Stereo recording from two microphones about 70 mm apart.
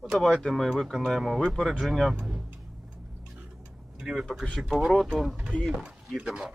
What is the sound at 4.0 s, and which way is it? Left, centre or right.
Speech, centre.